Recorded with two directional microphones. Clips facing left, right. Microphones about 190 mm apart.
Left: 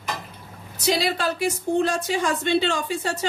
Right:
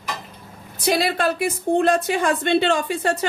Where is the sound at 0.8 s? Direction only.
55° right (ahead or behind).